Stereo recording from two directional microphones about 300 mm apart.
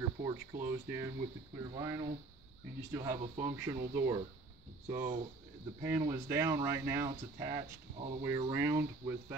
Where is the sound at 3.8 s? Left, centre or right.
Right.